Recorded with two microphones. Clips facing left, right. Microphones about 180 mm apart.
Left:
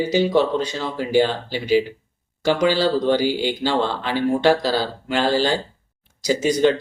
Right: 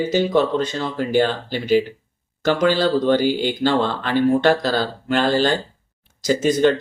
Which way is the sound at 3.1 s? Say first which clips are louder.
Right 2 dB; 50° right (ahead or behind).